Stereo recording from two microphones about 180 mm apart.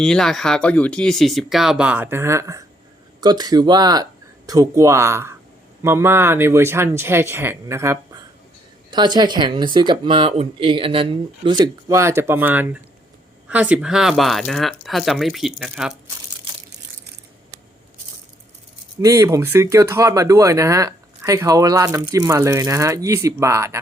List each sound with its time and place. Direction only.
0.0 s speech: 5° left (ahead or behind)
19.0 s speech: 20° right (ahead or behind)